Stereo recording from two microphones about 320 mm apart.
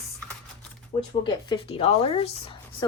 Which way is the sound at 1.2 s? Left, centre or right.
Centre.